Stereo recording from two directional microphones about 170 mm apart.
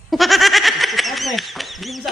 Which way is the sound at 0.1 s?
Centre (ahead or behind).